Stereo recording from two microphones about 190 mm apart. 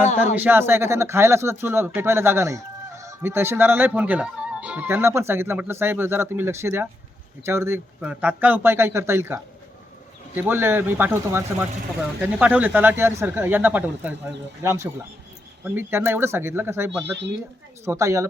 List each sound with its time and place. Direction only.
0.0 s speech: 40° left (ahead or behind)
0.3 s speech: 10° right (ahead or behind)